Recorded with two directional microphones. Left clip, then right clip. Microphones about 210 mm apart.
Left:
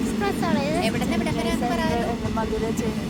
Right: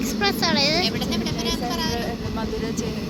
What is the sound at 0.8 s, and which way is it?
Vehicle, 40° left (ahead or behind).